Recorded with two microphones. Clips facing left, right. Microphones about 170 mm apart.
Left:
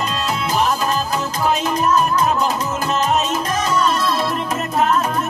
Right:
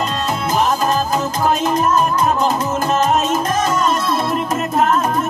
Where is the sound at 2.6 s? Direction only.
50° right (ahead or behind).